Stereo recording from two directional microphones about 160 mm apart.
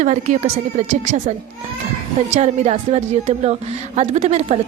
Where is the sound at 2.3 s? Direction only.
45° right (ahead or behind).